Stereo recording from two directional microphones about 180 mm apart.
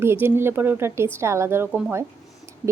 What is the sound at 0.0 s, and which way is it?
A woman's voice, 15° right (ahead or behind).